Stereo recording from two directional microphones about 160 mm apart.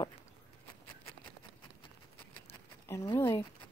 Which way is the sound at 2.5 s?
15° left (ahead or behind).